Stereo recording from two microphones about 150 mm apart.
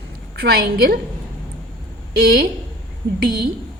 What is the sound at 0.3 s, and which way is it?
Speech, 90° right.